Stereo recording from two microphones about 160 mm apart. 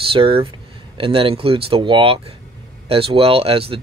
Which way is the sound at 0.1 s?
35° right (ahead or behind).